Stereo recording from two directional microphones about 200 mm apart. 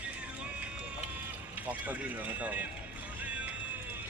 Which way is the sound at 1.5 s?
10° right (ahead or behind).